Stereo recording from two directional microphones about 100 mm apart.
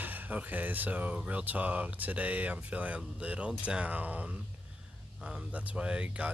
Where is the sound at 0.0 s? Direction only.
15° right (ahead or behind).